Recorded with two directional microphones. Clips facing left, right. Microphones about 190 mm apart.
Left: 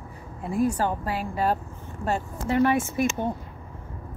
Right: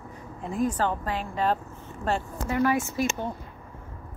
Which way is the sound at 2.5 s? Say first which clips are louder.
Left 3 dB; 30° left (ahead or behind).